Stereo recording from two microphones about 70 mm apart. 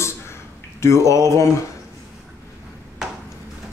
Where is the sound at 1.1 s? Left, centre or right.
Left.